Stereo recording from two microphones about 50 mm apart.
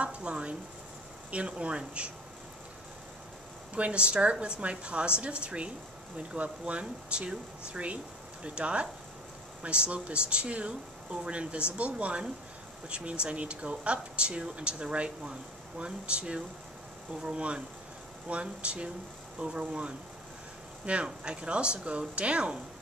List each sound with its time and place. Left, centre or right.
0.0 s speech: right
3.7 s speech: right
20.8 s speech: right